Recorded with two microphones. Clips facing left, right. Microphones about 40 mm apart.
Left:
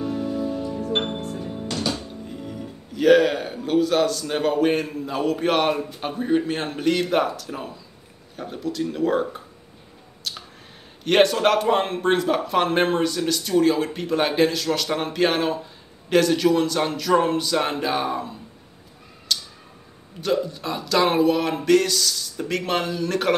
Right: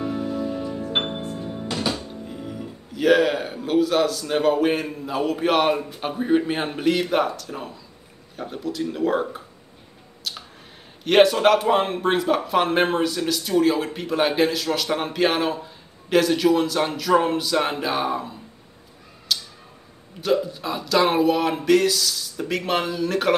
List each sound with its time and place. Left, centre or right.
0.0 s music: centre
2.0 s a man's voice: centre
10.3 s a sound: centre
11.1 s a man's voice: centre
19.3 s tick-tock: centre
20.2 s a man's voice: centre